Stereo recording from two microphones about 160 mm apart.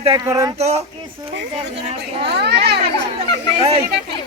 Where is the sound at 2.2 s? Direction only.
90° right.